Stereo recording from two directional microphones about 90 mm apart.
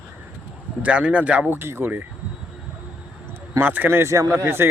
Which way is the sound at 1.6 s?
25° right (ahead or behind).